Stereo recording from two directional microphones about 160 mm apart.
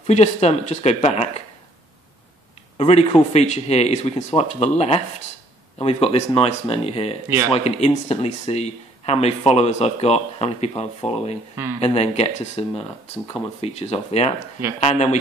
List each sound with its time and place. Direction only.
0.0 s speech: 45° left (ahead or behind)
2.8 s speech: 35° left (ahead or behind)